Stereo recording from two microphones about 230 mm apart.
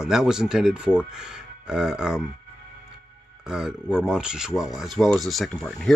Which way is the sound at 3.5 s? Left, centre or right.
Centre.